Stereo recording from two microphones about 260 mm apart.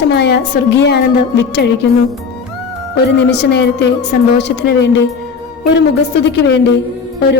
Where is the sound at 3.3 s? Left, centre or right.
Left.